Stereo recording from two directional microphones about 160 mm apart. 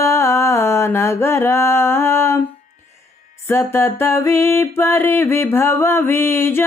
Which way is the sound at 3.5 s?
15° left (ahead or behind).